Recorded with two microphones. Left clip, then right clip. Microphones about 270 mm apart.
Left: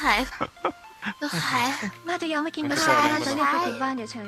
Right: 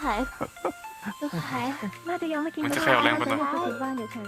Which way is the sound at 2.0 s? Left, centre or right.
Left.